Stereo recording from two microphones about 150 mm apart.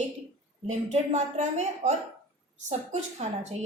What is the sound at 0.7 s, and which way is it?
A woman's voice, 50° right (ahead or behind).